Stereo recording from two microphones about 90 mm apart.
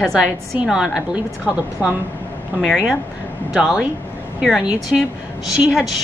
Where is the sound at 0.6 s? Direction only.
5° right (ahead or behind).